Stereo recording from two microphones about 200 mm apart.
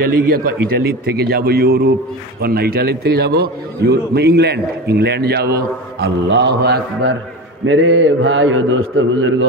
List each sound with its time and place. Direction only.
0.0 s a man's voice: 45° right (ahead or behind)
7.6 s a man's voice: 70° right (ahead or behind)